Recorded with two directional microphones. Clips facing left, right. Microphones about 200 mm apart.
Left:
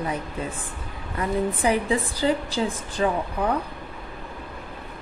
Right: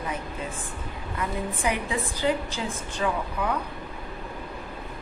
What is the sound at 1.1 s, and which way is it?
A woman's voice, 35° left (ahead or behind).